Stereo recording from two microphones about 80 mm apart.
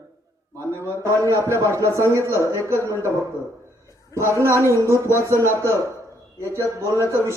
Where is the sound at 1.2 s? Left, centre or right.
Right.